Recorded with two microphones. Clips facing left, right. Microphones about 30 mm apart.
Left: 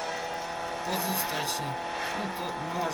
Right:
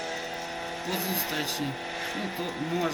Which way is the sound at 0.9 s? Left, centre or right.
Centre.